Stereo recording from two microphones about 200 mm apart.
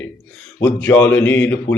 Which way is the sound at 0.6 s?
10° left (ahead or behind).